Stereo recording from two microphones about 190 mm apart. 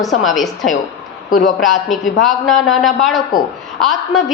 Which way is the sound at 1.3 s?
50° left (ahead or behind).